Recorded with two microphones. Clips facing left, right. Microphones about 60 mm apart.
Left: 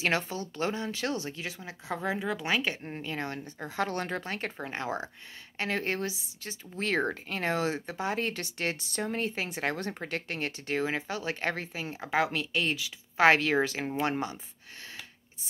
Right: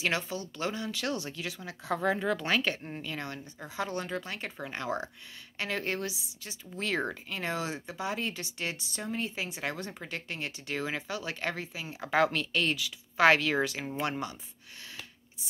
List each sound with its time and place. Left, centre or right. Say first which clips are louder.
0.0 s speech: left 2 dB; left
2.0 s speech: right 1 dB; centre; by 3.6 s left
3.6 s speech: left 3 dB; left
4.2 s speech: left 3 dB; left
12.0 s speech: right 2 dB; centre; by 14.4 s left